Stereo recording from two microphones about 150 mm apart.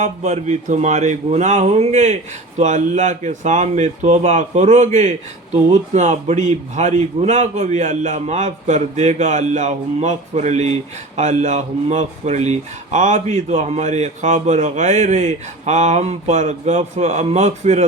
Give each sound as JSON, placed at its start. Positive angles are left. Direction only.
{"t": 0.0, "sound": "speech", "side_deg": -50}